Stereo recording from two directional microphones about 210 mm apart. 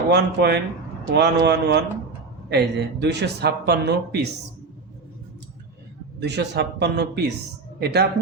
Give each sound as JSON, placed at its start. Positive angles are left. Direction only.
{"t": 0.1, "sound": "speech", "side_deg": -55}
{"t": 6.1, "sound": "speech", "side_deg": -55}